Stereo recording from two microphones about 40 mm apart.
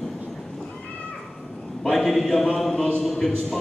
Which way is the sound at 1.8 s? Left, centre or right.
Centre.